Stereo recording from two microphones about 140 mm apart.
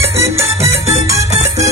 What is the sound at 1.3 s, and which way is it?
Music, 50° right (ahead or behind).